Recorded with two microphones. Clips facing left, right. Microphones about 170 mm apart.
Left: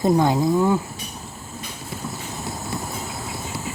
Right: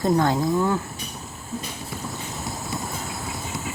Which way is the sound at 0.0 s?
15° left (ahead or behind).